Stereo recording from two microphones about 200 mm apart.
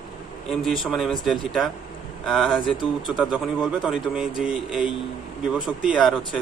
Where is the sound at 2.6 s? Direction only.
20° left (ahead or behind).